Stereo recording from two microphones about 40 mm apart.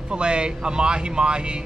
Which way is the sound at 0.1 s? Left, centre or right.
Right.